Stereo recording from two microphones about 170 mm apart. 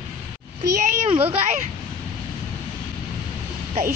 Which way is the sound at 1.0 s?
35° right (ahead or behind).